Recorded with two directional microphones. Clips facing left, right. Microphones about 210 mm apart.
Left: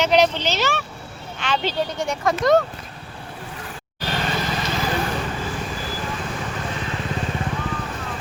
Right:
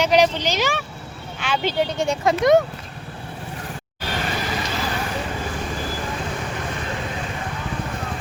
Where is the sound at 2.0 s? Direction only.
25° right (ahead or behind).